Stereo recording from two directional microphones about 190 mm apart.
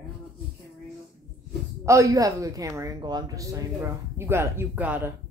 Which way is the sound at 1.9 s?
15° right (ahead or behind).